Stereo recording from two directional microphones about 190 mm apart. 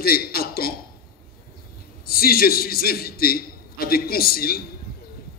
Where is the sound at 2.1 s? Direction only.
50° left (ahead or behind).